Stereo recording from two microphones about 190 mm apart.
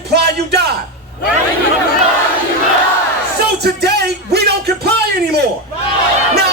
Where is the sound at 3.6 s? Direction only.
60° right (ahead or behind).